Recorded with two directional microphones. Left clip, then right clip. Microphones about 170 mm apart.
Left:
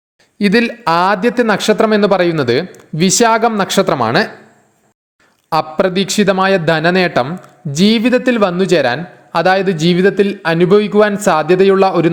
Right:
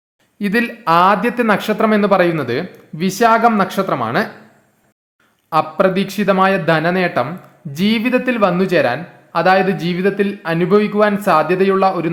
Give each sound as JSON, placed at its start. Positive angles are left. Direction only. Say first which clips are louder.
{"t": 0.3, "sound": "a man's voice", "louder": "left 5 dB", "side_deg": 30}
{"t": 5.5, "sound": "a man's voice", "louder": "even", "side_deg": 35}